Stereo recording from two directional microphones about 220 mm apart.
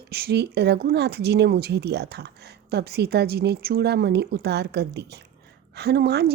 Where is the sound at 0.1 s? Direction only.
45° right (ahead or behind).